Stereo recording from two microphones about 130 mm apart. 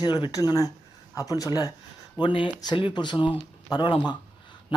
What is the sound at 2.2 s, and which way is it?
Speech, 40° left (ahead or behind).